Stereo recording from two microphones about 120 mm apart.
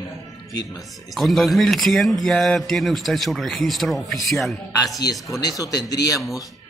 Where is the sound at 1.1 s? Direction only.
Centre (ahead or behind).